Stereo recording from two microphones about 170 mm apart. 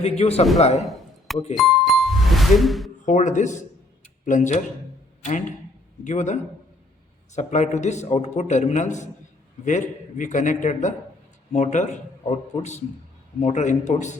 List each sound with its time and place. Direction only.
0.0 s a man's voice: 35° left (ahead or behind)
1.5 s music: centre (ahead or behind)
3.1 s a man's voice: 45° left (ahead or behind)